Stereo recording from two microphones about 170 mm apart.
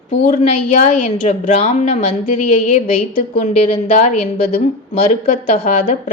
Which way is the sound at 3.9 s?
45° left (ahead or behind).